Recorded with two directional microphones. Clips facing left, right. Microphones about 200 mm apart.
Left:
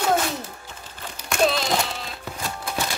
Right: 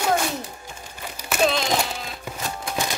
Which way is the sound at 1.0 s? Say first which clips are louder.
Even; 5° right (ahead or behind).